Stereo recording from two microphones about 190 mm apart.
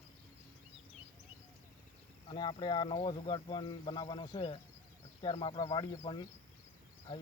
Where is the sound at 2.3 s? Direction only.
25° left (ahead or behind).